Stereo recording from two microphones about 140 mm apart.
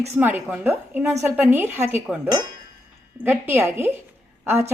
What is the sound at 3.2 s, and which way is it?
A woman's voice, 15° right (ahead or behind).